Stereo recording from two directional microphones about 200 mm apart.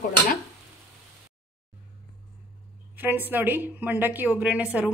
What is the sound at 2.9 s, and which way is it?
Speech, 10° right (ahead or behind).